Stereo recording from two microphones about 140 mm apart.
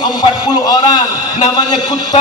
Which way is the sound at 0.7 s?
30° left (ahead or behind).